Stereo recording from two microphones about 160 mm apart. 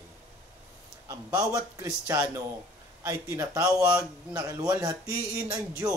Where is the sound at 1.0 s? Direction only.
20° right (ahead or behind).